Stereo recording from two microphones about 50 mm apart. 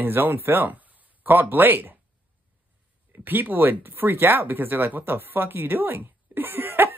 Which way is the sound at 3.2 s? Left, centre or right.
Right.